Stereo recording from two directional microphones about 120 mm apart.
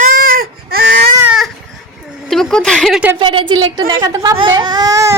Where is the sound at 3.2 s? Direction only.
40° right (ahead or behind).